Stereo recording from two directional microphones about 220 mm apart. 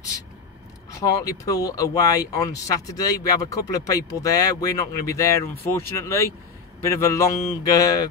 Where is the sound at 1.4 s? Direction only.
15° left (ahead or behind).